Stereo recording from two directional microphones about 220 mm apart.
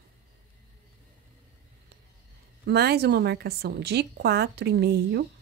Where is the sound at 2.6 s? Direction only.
45° right (ahead or behind).